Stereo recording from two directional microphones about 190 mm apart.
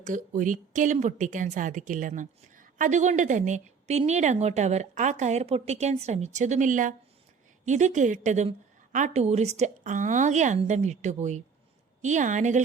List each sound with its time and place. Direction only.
0.0 s a woman's voice: 45° right (ahead or behind)